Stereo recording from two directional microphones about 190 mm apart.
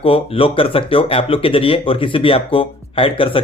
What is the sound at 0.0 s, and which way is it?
Speech, 30° left (ahead or behind).